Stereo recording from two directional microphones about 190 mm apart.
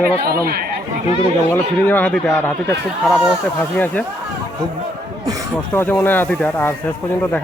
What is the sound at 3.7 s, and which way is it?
Speech, 10° left (ahead or behind).